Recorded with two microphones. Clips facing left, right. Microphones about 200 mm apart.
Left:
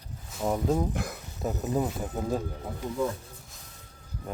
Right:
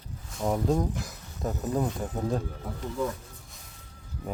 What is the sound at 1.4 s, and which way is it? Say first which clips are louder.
Speech: even; 5° left (ahead or behind).